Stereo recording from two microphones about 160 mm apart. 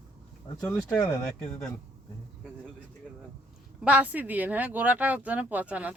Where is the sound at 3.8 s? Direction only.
10° right (ahead or behind).